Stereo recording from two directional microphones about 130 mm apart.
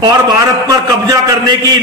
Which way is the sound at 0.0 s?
30° right (ahead or behind).